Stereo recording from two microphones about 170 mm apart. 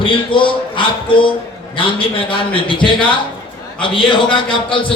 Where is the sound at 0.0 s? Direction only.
30° left (ahead or behind).